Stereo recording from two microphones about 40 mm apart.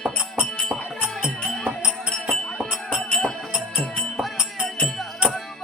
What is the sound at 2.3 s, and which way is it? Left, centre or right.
Music, left.